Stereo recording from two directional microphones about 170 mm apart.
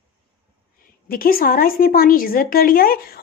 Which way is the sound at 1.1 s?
60° left (ahead or behind).